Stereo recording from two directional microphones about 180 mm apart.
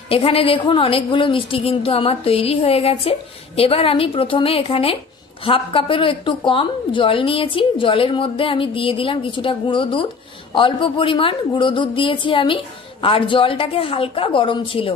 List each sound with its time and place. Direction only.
0.1 s a woman's voice: 30° left (ahead or behind)